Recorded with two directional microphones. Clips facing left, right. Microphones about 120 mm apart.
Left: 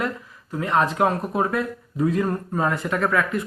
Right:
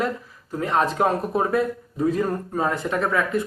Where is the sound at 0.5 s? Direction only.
35° right (ahead or behind).